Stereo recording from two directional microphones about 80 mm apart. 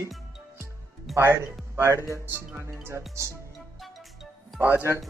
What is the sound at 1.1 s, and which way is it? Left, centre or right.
Speech, right.